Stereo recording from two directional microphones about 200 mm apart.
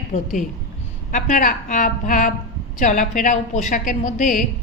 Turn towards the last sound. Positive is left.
turn(degrees=40)  # may be behind; listen again after turning